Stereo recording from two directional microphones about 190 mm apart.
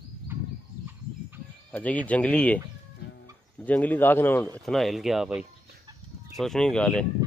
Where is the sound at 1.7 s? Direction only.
10° left (ahead or behind).